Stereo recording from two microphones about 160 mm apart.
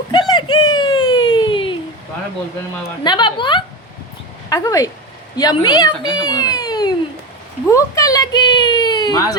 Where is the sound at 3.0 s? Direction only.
30° left (ahead or behind).